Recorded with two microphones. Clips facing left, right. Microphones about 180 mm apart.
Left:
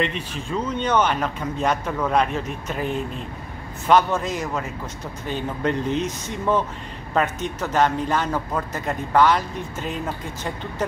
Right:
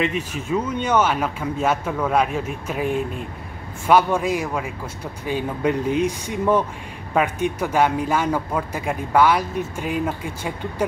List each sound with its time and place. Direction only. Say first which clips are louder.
0.0 s speech: right 2 dB; 5° right (ahead or behind)